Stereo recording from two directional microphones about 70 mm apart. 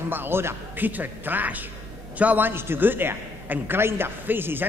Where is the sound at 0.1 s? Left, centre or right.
Right.